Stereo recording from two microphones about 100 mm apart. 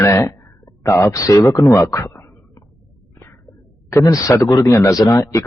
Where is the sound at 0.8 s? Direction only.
35° left (ahead or behind).